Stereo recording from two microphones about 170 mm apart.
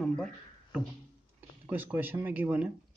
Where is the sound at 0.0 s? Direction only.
5° left (ahead or behind).